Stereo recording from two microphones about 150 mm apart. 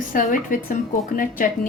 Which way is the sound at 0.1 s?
60° left (ahead or behind).